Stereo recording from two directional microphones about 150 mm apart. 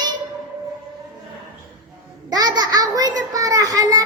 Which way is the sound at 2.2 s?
25° right (ahead or behind).